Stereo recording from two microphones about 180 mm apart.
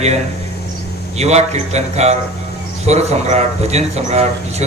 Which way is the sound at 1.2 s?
40° right (ahead or behind).